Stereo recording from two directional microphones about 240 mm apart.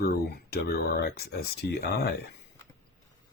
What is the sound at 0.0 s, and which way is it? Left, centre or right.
Speech, left.